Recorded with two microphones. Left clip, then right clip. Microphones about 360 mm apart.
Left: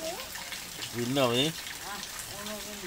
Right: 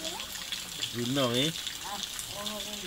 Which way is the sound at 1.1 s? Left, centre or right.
Centre.